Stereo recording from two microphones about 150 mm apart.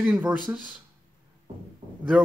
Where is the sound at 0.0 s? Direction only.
10° right (ahead or behind).